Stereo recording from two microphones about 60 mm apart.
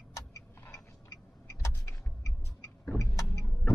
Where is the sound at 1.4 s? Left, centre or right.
Left.